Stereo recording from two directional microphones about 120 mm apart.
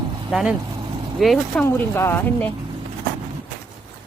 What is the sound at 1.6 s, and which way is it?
Speech, 20° left (ahead or behind).